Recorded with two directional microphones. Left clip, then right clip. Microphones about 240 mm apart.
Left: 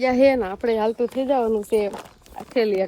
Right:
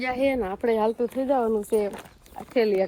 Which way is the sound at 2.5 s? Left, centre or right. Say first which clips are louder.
Left 1 dB; centre.